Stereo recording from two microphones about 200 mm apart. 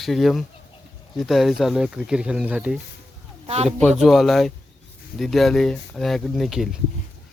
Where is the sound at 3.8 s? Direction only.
Centre (ahead or behind).